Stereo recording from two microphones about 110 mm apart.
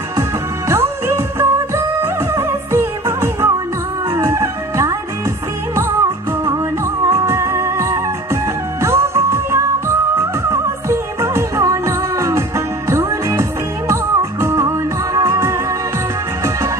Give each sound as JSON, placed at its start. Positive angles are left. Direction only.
{"t": 0.7, "sound": "music", "side_deg": -25}